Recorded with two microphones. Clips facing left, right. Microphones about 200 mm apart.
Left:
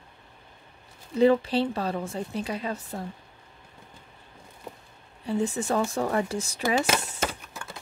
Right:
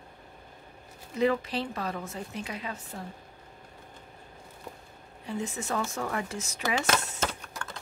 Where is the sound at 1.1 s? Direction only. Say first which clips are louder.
Left 6 dB; 30° left (ahead or behind).